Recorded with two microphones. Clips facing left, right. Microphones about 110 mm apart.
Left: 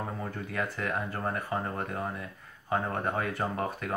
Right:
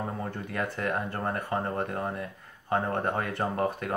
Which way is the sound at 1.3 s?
40° right (ahead or behind).